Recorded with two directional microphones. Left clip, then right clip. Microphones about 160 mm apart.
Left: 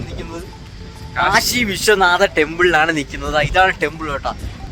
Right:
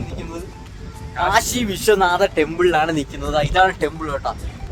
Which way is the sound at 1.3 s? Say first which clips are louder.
Left 2 dB; 15° left (ahead or behind).